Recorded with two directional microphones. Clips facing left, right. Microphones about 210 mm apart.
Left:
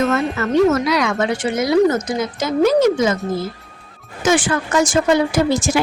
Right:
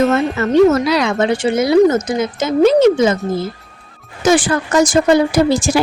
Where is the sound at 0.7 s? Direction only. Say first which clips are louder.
Right 3 dB; 30° right (ahead or behind).